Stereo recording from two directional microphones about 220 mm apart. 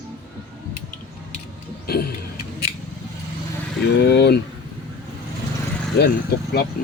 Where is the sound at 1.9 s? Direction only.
45° left (ahead or behind).